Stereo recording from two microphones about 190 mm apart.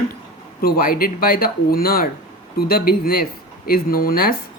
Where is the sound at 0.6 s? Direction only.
50° left (ahead or behind).